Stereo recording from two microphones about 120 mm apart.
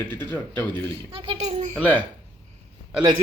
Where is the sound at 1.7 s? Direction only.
15° left (ahead or behind).